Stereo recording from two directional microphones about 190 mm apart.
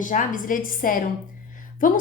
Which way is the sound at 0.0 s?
45° left (ahead or behind).